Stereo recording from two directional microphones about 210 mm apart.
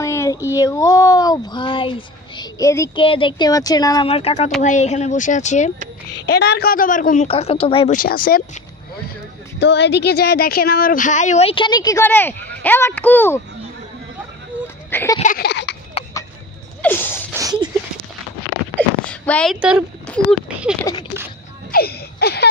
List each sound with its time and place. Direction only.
0.0 s a sound: 15° left (ahead or behind)
0.6 s speech: 15° left (ahead or behind); by 5.7 s 35° left (ahead or behind)
6.2 s a woman's voice: 50° left (ahead or behind)
7.2 s speech: 30° left (ahead or behind)
7.9 s a woman's voice: 40° left (ahead or behind)
9.6 s speech: 55° left (ahead or behind); by 13.4 s 10° left (ahead or behind)
14.9 s speech: 10° left (ahead or behind)
15.3 s a sound: 50° left (ahead or behind)
16.8 s sneeze: 10° left (ahead or behind)
17.3 s a sound: 15° right (ahead or behind)
18.8 s speech: 5° left (ahead or behind)
21.7 s a sound: 50° left (ahead or behind)